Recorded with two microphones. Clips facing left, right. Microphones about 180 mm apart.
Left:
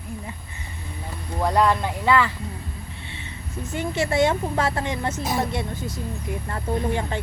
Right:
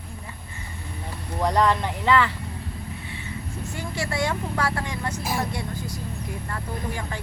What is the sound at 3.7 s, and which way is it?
A woman's voice, 20° left (ahead or behind).